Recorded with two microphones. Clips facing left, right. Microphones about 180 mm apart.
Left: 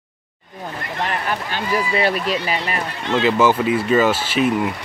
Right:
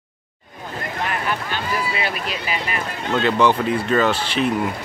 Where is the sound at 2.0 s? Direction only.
40° left (ahead or behind).